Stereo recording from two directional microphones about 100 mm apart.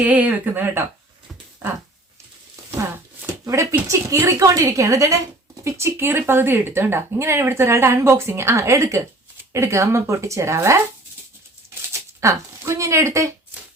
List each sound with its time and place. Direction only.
0.0 s speech: 15° right (ahead or behind)
2.7 s a sound: 25° right (ahead or behind)
3.4 s speech: 30° right (ahead or behind)
12.2 s speech: 30° right (ahead or behind)